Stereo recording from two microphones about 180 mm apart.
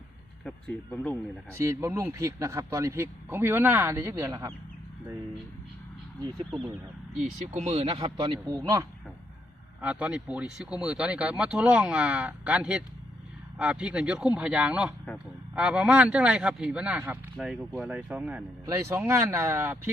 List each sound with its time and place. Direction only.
0.4 s speech: 10° left (ahead or behind)
1.5 s speech: 15° right (ahead or behind)
7.2 s speech: 35° right (ahead or behind); by 8.9 s 20° right (ahead or behind)
9.8 s speech: 5° right (ahead or behind)
18.6 s speech: 20° right (ahead or behind)